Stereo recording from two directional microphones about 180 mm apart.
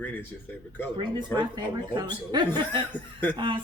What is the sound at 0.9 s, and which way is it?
A woman's voice, 25° right (ahead or behind).